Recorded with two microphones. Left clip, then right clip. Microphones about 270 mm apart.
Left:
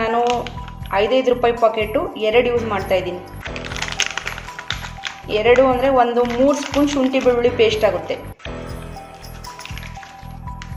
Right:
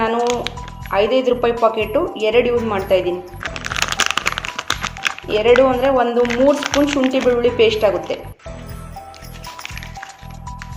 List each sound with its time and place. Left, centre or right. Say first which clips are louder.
0.0 s speech: even; centre
3.6 s music: right 4 dB; centre
5.3 s speech: right 1 dB; centre